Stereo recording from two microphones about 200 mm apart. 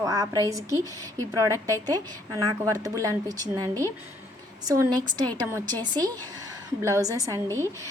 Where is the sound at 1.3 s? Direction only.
15° right (ahead or behind).